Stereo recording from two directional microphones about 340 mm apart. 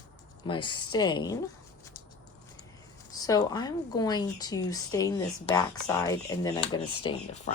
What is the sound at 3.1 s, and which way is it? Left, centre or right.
Speech, centre.